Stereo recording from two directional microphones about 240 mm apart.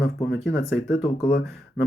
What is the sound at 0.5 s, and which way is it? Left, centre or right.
Speech, left.